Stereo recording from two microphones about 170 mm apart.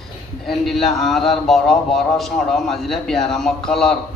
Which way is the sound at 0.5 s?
Centre (ahead or behind).